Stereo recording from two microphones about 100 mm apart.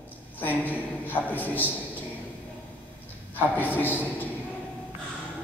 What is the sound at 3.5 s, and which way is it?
Speech, 20° left (ahead or behind).